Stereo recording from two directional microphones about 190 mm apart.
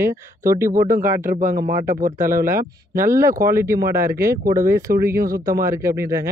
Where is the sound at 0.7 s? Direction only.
45° right (ahead or behind).